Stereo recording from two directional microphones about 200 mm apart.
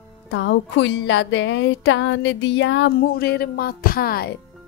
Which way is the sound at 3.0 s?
50° left (ahead or behind).